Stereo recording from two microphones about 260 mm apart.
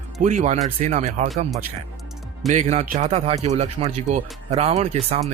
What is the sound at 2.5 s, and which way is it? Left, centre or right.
Speech, right.